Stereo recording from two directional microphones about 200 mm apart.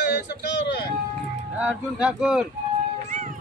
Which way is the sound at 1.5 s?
5° right (ahead or behind).